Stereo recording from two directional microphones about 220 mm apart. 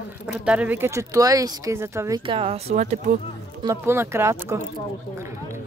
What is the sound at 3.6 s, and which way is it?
Speech, 15° right (ahead or behind).